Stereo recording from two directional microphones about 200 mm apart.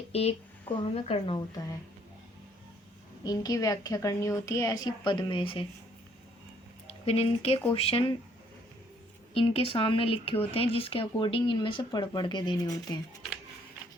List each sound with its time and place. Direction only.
0.1 s a woman's voice: 30° left (ahead or behind)
3.2 s a woman's voice: 20° left (ahead or behind)
7.0 s speech: 30° left (ahead or behind)
9.3 s speech: 30° left (ahead or behind)